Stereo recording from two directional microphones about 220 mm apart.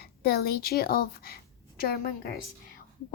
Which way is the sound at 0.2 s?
45° left (ahead or behind).